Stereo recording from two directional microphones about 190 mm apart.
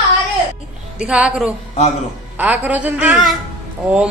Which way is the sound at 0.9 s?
5° right (ahead or behind).